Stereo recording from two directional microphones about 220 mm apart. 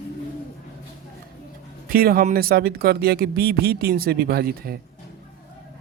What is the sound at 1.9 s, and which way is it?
Speech, 45° right (ahead or behind).